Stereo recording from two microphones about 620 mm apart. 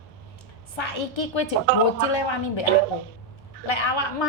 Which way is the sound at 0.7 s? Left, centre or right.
Left.